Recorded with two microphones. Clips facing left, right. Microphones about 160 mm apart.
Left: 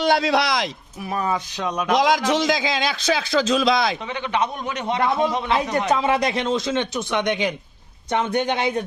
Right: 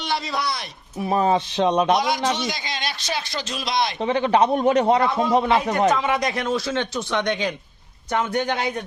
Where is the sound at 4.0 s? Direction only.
35° right (ahead or behind).